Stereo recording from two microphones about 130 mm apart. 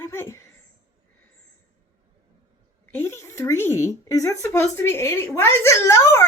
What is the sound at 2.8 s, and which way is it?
Speech, 15° left (ahead or behind).